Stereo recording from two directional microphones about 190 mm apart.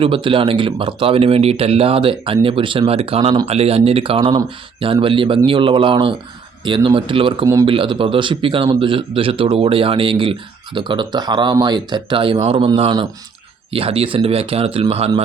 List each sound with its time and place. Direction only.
0.0 s speech: 30° right (ahead or behind)
7.4 s a man's voice: 15° right (ahead or behind)
7.7 s speech: 25° right (ahead or behind)